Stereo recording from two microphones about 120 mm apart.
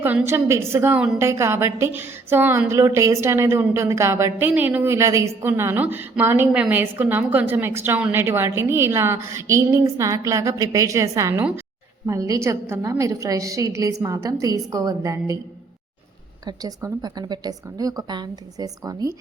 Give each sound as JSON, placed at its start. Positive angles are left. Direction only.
{"t": 0.0, "sound": "a woman's voice", "side_deg": -15}
{"t": 16.5, "sound": "a woman's voice", "side_deg": -30}